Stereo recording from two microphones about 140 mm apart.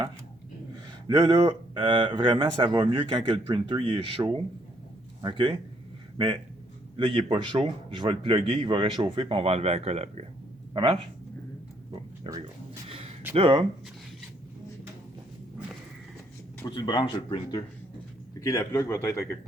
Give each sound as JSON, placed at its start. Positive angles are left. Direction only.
{"t": 1.0, "sound": "a man's voice", "side_deg": -25}
{"t": 12.9, "sound": "a sound", "side_deg": -45}
{"t": 13.3, "sound": "a man's voice", "side_deg": -35}
{"t": 16.6, "sound": "speech", "side_deg": 30}
{"t": 18.3, "sound": "a man's voice", "side_deg": 20}